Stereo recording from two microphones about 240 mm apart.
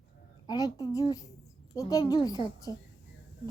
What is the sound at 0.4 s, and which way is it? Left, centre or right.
A child's voice, centre.